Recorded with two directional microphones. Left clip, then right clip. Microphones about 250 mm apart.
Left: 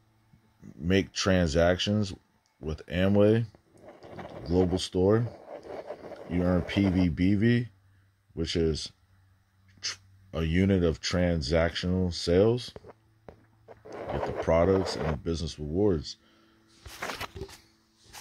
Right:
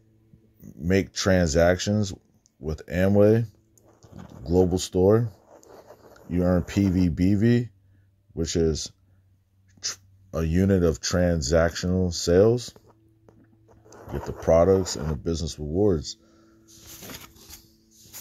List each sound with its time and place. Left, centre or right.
0.6 s speech: centre
5.3 s writing: left
5.7 s a sound: centre
6.3 s speech: centre
12.7 s a sound: left
14.4 s speech: centre